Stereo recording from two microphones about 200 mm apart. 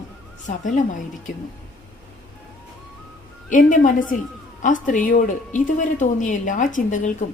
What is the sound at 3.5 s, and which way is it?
A woman's voice, 40° left (ahead or behind).